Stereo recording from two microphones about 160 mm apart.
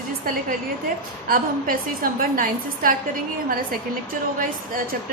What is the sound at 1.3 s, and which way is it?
A woman's voice, 60° right (ahead or behind).